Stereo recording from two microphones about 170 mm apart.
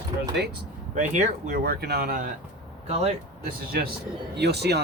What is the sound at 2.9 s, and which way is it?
Speech, 40° right (ahead or behind).